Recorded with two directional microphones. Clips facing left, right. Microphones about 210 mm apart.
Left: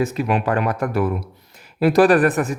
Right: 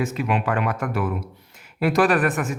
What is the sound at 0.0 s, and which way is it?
Speech, 40° left (ahead or behind).